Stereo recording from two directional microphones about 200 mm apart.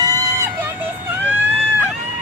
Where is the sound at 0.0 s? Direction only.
15° right (ahead or behind).